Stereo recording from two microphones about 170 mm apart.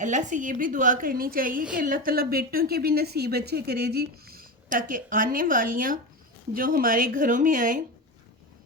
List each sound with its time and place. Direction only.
0.0 s a woman's voice: 45° right (ahead or behind)